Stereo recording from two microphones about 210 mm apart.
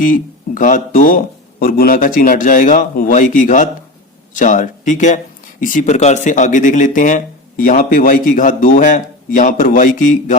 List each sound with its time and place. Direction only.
0.0 s speech: 40° left (ahead or behind)